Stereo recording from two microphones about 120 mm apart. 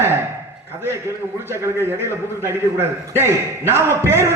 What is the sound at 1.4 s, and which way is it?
A man's voice, 20° right (ahead or behind).